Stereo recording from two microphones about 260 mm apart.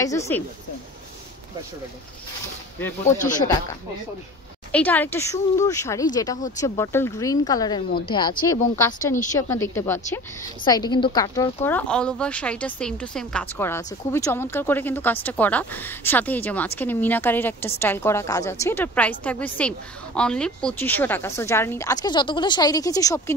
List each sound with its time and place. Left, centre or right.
0.0 s speech: centre
3.2 s speech: left
4.7 s speech: centre